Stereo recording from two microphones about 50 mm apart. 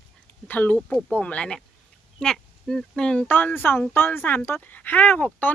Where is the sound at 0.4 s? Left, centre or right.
Left.